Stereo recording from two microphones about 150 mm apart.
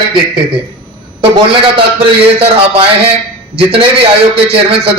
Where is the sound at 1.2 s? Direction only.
35° right (ahead or behind).